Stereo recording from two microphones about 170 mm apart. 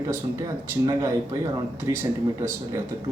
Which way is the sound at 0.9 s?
20° right (ahead or behind).